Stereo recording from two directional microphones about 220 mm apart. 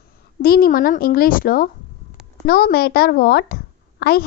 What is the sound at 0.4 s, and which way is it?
A woman's voice, 40° left (ahead or behind).